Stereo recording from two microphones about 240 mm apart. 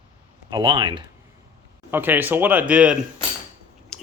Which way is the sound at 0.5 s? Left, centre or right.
Centre.